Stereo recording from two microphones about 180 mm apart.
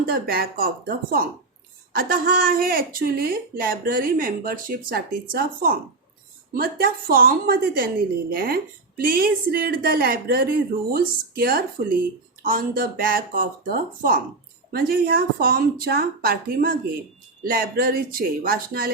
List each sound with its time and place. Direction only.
0.0 s a woman's voice: 55° right (ahead or behind)